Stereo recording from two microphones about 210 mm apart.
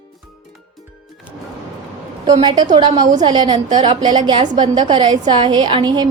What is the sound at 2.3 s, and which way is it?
A woman's voice, 20° right (ahead or behind).